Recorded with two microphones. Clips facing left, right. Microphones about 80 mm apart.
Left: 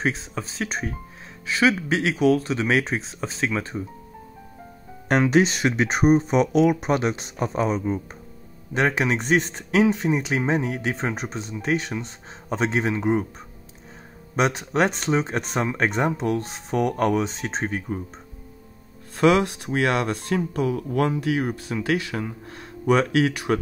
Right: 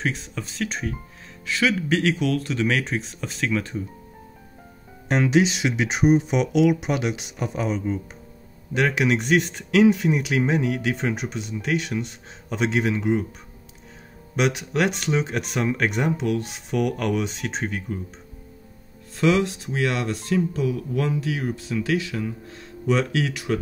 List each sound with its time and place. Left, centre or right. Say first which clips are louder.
0.0 s speech: left 2 dB; left
5.3 s speech: left 1 dB; left
14.3 s speech: left 1 dB; left
19.1 s speech: left 2 dB; left